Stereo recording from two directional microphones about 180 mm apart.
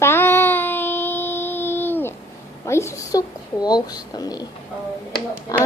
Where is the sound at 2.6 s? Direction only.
15° left (ahead or behind).